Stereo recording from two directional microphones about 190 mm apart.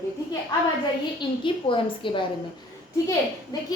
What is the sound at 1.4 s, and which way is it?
Speech, 25° left (ahead or behind).